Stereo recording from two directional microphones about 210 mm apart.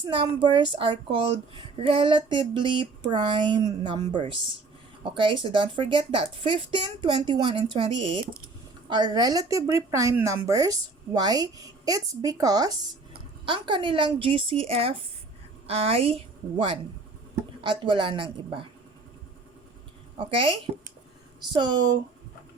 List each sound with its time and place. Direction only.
0.0 s a woman's voice: 20° right (ahead or behind)
17.6 s a woman's voice: 25° right (ahead or behind)
20.1 s a woman's voice: 25° right (ahead or behind)